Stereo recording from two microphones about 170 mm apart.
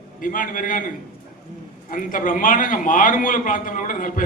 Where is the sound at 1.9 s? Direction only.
50° left (ahead or behind).